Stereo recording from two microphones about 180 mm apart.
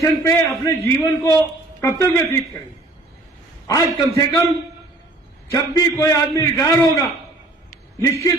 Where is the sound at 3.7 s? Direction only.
20° left (ahead or behind).